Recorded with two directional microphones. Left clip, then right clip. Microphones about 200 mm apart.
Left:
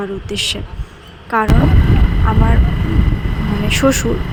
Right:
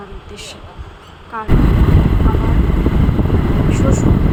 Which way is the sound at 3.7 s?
40° left (ahead or behind).